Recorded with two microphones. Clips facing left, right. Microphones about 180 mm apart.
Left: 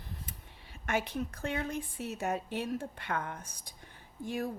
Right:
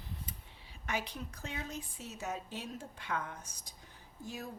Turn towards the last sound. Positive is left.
turn(degrees=55)  # may be behind; listen again after turning